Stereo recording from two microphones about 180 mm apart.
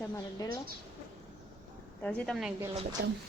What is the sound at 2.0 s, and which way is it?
Speech, 5° left (ahead or behind).